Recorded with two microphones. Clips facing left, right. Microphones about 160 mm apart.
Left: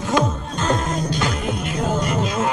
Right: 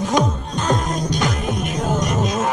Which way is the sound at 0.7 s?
15° right (ahead or behind).